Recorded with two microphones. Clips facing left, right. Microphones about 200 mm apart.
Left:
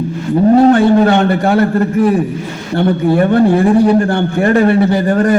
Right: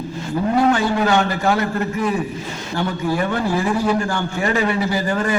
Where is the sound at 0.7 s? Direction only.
55° left (ahead or behind).